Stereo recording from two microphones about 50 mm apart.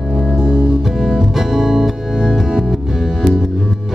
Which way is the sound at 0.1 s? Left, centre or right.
Centre.